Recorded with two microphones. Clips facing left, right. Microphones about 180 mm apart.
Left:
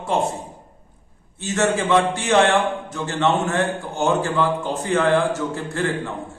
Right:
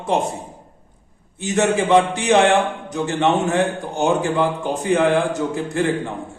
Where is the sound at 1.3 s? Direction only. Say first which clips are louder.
Right 2 dB; 15° right (ahead or behind).